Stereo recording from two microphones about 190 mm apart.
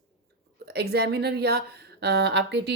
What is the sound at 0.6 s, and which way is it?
Speech, 60° right (ahead or behind).